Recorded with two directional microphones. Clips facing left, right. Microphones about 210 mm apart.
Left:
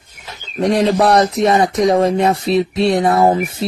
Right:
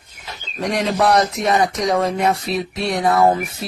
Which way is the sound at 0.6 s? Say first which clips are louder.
Left 5 dB; 30° left (ahead or behind).